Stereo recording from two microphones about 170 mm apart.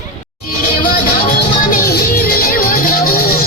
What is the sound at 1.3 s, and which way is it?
Music, 60° left (ahead or behind).